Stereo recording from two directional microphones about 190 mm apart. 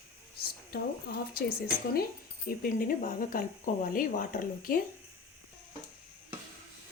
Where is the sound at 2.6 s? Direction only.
45° left (ahead or behind).